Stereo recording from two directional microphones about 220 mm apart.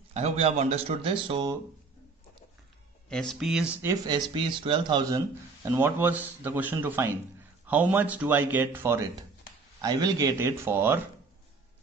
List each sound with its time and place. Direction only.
0.1 s speech: 30° right (ahead or behind)
3.1 s speech: centre (ahead or behind)
3.7 s speech: 15° right (ahead or behind)
5.7 s speech: 10° right (ahead or behind)